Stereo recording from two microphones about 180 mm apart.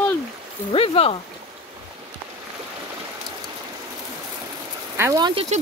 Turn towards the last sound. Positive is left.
turn(degrees=-25)  # may be behind; listen again after turning